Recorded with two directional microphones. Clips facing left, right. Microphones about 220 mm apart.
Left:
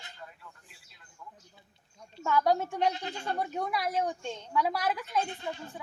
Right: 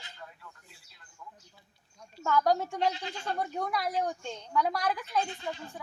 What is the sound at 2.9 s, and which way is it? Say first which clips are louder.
Speech: left 1 dB; 50° left (ahead or behind).